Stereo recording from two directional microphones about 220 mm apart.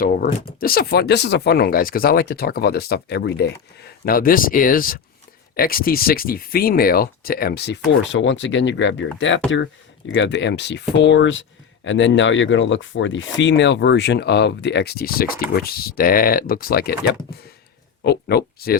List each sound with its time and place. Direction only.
0.0 s speech: 40° left (ahead or behind)